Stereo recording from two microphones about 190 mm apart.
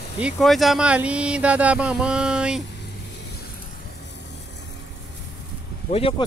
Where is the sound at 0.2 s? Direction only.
Centre (ahead or behind).